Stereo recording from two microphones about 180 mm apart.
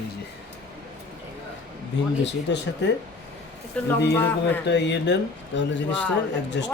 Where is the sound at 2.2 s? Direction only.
75° left (ahead or behind).